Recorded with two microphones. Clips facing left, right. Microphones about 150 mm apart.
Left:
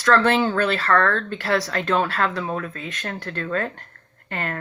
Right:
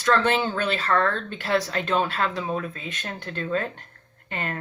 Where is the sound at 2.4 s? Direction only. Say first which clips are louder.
Left 1 dB; 15° right (ahead or behind).